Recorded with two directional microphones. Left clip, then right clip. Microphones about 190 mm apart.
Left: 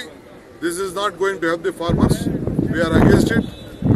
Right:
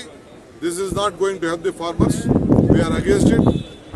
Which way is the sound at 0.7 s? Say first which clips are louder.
Right 1 dB; centre (ahead or behind).